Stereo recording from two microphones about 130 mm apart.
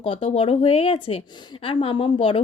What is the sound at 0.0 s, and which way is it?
Speech, 40° left (ahead or behind).